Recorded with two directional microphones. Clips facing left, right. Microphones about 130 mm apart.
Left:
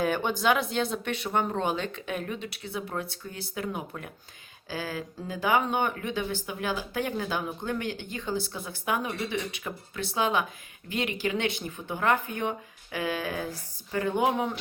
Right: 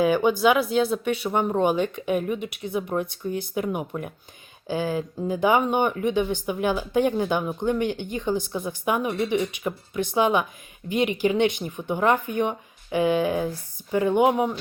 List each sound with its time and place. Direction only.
0.0 s speech: 10° right (ahead or behind)